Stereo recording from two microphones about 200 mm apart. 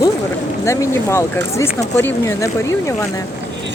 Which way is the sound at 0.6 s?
15° left (ahead or behind).